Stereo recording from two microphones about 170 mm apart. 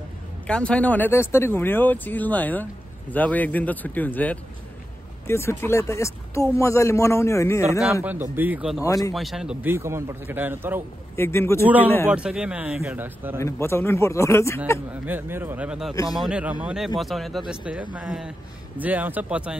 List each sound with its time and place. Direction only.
0.5 s speech: 5° left (ahead or behind)
7.9 s a man's voice: 10° right (ahead or behind)
8.8 s speech: 20° left (ahead or behind)
9.1 s a man's voice: centre (ahead or behind)
11.1 s speech: 15° left (ahead or behind)
11.6 s a man's voice: 10° right (ahead or behind)
13.4 s speech: 15° left (ahead or behind)
15.0 s a man's voice: 10° right (ahead or behind)
15.9 s speech: 20° left (ahead or behind)
16.2 s a man's voice: 5° right (ahead or behind)